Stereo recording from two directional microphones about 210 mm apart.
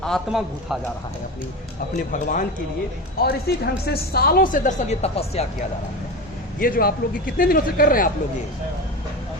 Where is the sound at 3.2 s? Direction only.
50° left (ahead or behind); by 5.7 s 30° left (ahead or behind).